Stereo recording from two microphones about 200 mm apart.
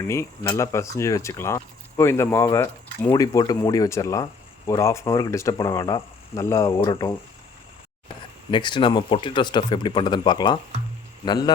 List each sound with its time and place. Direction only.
0.1 s speech: 15° left (ahead or behind)
8.4 s speech: 25° left (ahead or behind)